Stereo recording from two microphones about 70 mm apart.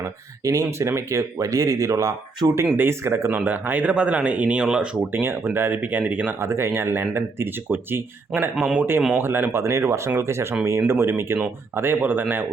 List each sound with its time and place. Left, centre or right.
0.0 s speech: right
2.7 s speech: right
3.3 s a man's voice: right
5.1 s speech: right
5.8 s a man's voice: right
6.4 s a man's voice: right